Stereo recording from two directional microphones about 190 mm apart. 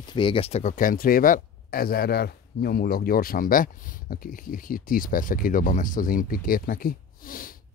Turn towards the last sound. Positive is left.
turn(degrees=50)  # may be behind; listen again after turning